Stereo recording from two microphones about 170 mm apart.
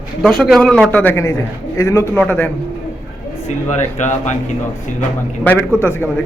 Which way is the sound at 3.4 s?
45° left (ahead or behind).